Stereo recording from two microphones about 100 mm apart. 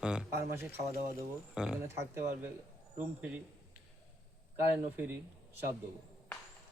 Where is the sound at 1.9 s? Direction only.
25° right (ahead or behind).